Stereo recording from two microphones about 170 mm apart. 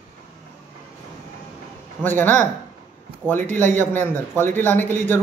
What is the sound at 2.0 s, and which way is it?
Speech, 10° left (ahead or behind).